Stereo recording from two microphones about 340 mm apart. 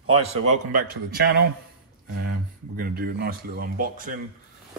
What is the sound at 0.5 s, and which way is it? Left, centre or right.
Speech, right.